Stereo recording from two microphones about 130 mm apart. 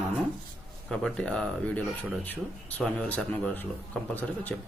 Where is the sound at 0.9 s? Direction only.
5° left (ahead or behind).